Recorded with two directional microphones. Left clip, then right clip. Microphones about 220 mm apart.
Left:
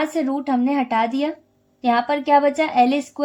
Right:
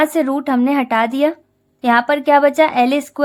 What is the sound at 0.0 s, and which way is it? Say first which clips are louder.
A woman's voice: right 6 dB; 40° right (ahead or behind).